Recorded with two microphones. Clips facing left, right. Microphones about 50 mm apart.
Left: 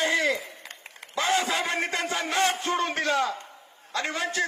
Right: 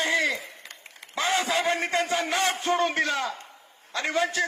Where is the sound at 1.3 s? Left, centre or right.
Right.